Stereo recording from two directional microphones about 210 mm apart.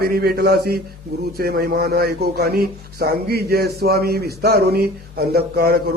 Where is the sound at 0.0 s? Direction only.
45° right (ahead or behind).